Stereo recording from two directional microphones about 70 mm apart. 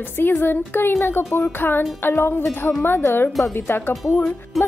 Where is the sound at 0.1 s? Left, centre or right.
Left.